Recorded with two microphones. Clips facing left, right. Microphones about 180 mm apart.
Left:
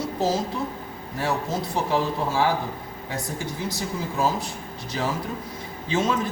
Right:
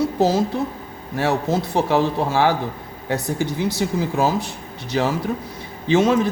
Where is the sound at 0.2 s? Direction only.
70° right (ahead or behind).